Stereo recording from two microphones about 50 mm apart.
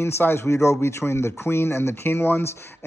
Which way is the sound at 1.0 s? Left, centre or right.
Left.